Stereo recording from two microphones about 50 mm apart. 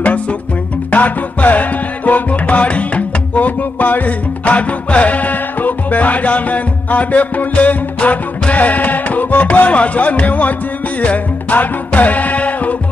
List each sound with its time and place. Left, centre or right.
0.0 s music: left